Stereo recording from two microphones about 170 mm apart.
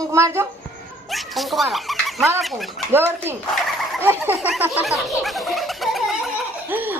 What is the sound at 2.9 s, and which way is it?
Speech, 15° right (ahead or behind).